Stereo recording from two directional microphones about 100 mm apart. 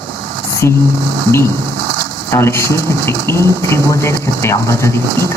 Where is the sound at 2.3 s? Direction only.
25° left (ahead or behind).